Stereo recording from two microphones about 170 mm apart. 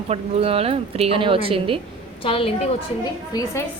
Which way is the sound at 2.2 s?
35° left (ahead or behind).